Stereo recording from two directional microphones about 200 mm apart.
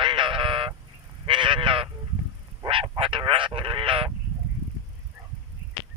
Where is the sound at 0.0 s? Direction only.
25° right (ahead or behind).